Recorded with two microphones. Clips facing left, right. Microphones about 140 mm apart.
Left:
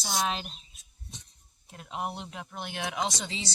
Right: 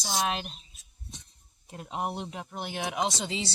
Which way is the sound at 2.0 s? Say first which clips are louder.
Right 3 dB; 15° right (ahead or behind).